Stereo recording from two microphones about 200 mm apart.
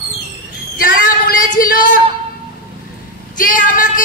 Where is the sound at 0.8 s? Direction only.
40° left (ahead or behind).